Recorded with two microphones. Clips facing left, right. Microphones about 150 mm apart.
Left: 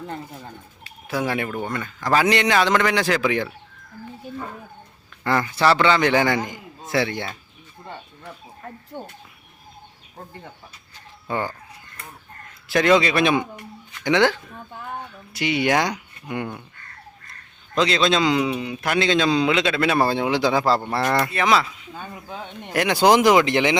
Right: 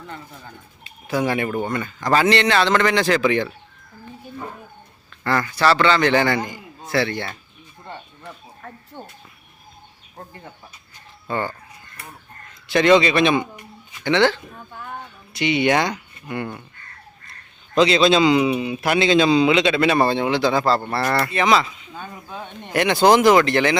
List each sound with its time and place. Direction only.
1.0 s a man's voice: centre (ahead or behind)
2.2 s a man's voice: 15° left (ahead or behind)
5.2 s a man's voice: 20° left (ahead or behind)
11.3 s a man's voice: 10° left (ahead or behind)
12.6 s a man's voice: 5° left (ahead or behind)
17.7 s a man's voice: 5° right (ahead or behind); by 23.7 s 15° left (ahead or behind)